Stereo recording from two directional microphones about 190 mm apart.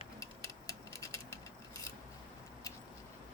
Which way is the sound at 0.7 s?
15° left (ahead or behind).